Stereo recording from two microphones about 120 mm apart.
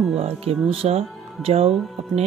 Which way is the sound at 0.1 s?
55° right (ahead or behind).